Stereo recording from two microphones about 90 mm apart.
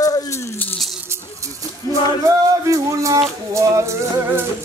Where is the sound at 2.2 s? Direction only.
35° right (ahead or behind).